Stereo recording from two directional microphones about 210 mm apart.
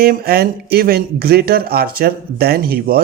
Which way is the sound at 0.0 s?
45° right (ahead or behind).